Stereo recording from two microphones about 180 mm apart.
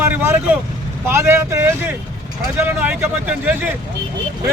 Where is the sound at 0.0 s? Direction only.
15° right (ahead or behind).